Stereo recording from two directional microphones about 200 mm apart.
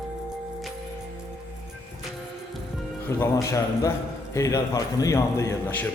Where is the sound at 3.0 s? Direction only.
15° left (ahead or behind).